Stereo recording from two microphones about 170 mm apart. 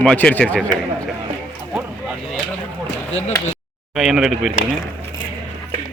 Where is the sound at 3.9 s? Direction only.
Centre (ahead or behind).